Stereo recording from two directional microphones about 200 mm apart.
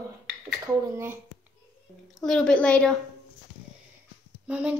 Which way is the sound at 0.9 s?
10° right (ahead or behind).